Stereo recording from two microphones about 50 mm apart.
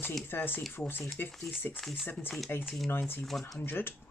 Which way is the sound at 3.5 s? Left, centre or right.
Left.